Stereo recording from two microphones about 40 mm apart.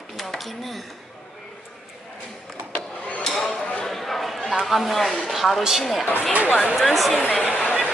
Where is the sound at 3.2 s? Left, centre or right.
Centre.